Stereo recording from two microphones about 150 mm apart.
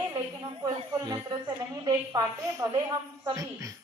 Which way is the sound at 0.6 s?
25° right (ahead or behind).